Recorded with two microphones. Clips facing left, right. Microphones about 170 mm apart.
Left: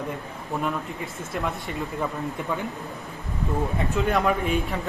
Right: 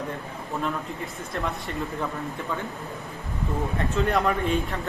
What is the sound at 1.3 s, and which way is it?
Speech, centre (ahead or behind).